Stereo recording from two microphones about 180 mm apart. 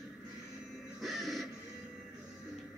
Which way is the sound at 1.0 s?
Centre (ahead or behind).